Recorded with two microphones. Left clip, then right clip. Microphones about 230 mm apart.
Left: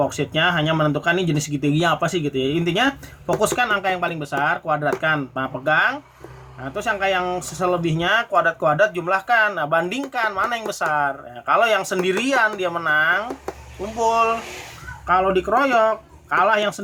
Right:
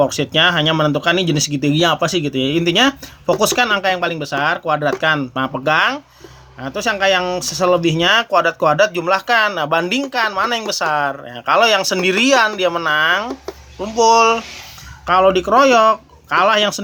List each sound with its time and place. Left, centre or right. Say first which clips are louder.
0.0 s speech: right 6 dB; right